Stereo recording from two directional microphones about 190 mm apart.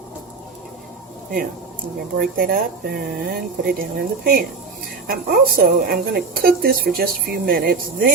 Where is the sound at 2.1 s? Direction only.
50° right (ahead or behind).